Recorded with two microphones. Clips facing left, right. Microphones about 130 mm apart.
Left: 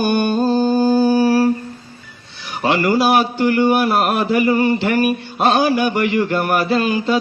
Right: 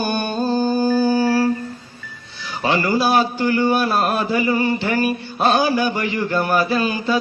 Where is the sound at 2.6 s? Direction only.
20° left (ahead or behind).